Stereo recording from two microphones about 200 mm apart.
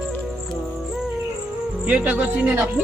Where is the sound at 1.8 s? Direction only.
5° right (ahead or behind).